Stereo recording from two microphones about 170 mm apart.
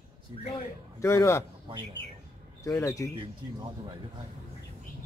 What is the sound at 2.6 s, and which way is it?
Speech, 15° left (ahead or behind).